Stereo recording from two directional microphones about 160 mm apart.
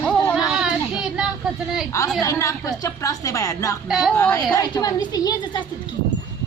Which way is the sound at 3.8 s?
Centre (ahead or behind).